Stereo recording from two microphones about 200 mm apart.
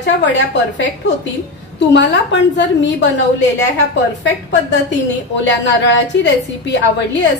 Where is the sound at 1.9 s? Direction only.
65° left (ahead or behind).